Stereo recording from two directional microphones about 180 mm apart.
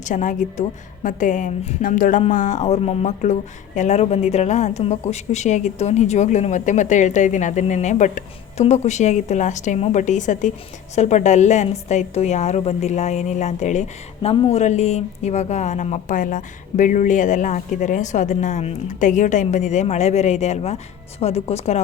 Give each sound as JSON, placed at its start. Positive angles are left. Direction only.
{"t": 0.0, "sound": "a woman's voice", "side_deg": 45}